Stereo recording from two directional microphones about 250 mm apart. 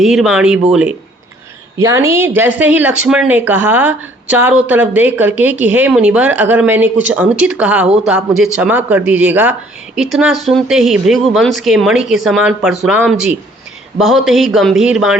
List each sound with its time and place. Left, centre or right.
0.0 s speech: centre